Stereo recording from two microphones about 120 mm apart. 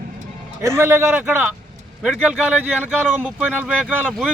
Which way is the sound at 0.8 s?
20° right (ahead or behind).